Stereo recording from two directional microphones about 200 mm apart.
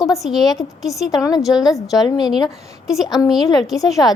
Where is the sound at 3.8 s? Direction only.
15° left (ahead or behind).